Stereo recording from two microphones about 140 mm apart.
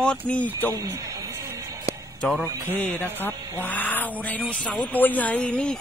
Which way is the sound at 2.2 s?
10° left (ahead or behind).